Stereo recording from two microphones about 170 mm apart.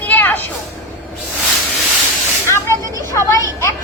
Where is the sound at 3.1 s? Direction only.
20° left (ahead or behind).